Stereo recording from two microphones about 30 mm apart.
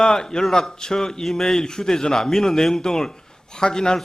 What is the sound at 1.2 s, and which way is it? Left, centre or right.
A man's voice, centre.